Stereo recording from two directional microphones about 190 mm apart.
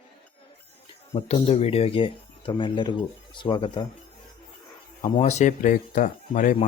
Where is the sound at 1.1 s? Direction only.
30° left (ahead or behind).